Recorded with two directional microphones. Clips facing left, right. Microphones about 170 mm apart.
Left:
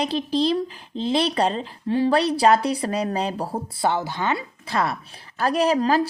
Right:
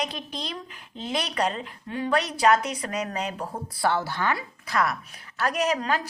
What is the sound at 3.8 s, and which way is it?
A woman's voice, 20° left (ahead or behind).